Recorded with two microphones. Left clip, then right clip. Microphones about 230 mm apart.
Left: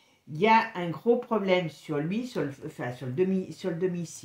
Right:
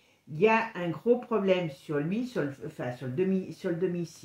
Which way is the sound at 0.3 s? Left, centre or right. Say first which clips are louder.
Left 3 dB; left.